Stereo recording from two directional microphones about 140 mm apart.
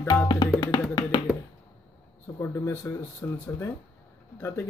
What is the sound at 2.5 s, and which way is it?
Speech, 20° left (ahead or behind).